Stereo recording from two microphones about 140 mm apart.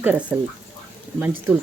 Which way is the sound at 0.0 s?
10° right (ahead or behind).